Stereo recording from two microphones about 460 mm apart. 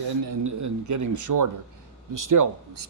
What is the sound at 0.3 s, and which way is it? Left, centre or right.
Speech, right.